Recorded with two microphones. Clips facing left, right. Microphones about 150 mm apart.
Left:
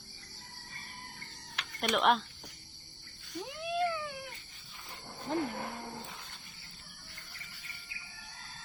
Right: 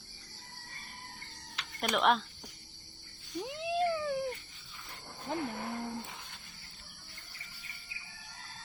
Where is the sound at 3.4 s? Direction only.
20° right (ahead or behind).